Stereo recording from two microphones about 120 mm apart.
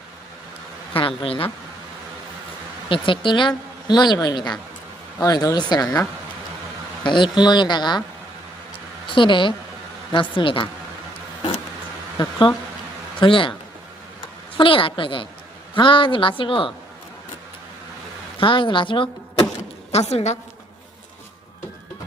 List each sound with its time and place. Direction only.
0.9 s speech: 50° left (ahead or behind)
2.9 s a woman's voice: 45° left (ahead or behind)
7.0 s a woman's voice: 40° left (ahead or behind)
9.0 s a woman's voice: 45° left (ahead or behind)
12.1 s speech: 40° left (ahead or behind)
14.5 s a woman's voice: 45° left (ahead or behind)
18.3 s speech: 45° left (ahead or behind)
19.9 s a woman's voice: 65° left (ahead or behind)